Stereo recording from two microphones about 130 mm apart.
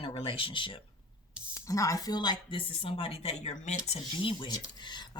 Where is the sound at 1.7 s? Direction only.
25° left (ahead or behind); by 4.0 s 60° left (ahead or behind).